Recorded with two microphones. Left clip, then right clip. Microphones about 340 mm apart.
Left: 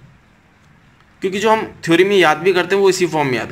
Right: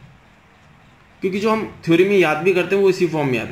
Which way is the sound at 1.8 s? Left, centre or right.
Left.